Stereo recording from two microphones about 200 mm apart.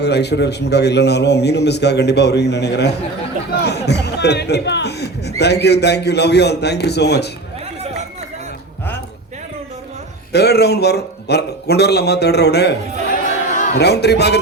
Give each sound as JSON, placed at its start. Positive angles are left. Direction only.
{"t": 0.0, "sound": "a man's voice", "side_deg": 55}
{"t": 3.5, "sound": "a sound", "side_deg": 55}
{"t": 5.4, "sound": "a man's voice", "side_deg": 55}
{"t": 10.3, "sound": "a man's voice", "side_deg": 55}
{"t": 13.7, "sound": "a man's voice", "side_deg": 55}